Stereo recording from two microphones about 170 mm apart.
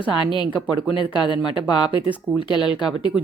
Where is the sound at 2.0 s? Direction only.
10° right (ahead or behind).